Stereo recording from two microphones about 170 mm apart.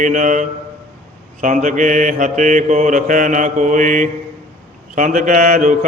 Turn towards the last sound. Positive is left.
turn(degrees=-55)  # may be behind; listen again after turning